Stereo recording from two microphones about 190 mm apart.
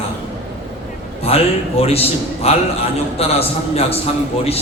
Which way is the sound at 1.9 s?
30° left (ahead or behind).